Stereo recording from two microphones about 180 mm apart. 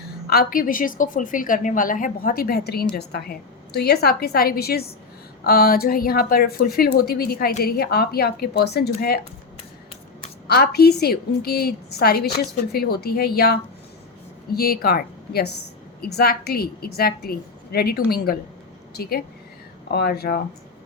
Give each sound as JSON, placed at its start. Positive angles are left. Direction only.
{"t": 0.3, "sound": "a woman's voice", "side_deg": 55}
{"t": 10.4, "sound": "a woman's voice", "side_deg": 60}